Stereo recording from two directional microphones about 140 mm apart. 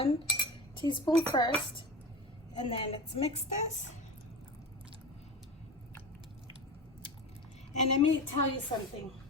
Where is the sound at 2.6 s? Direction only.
40° left (ahead or behind).